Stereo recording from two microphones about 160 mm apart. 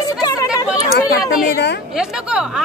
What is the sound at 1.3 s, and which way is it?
Speech, 90° left.